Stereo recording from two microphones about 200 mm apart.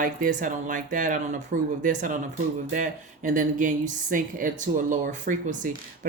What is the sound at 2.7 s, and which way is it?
Speech, 40° right (ahead or behind).